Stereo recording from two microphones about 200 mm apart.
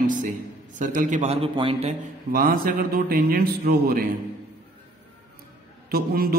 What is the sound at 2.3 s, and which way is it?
A man's voice, 45° right (ahead or behind).